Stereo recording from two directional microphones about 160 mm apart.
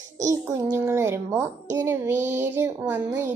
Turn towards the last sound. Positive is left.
turn(degrees=-15)  # may be behind; listen again after turning